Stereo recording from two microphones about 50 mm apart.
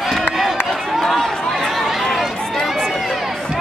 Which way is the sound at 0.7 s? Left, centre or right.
Centre.